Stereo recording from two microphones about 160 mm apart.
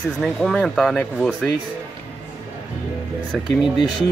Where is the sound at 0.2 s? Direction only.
Centre (ahead or behind).